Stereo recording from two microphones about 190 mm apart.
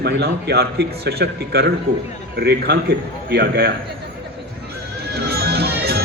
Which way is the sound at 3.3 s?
60° right (ahead or behind).